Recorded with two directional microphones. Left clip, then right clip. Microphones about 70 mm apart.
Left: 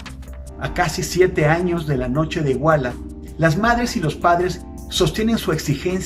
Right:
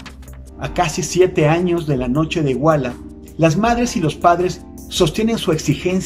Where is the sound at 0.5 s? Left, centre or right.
Right.